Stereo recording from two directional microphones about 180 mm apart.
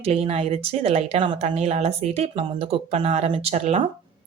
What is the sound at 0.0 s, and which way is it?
Speech, 35° right (ahead or behind).